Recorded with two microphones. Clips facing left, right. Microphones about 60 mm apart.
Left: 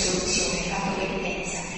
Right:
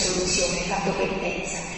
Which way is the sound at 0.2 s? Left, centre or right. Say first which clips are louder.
Right 3 dB; right.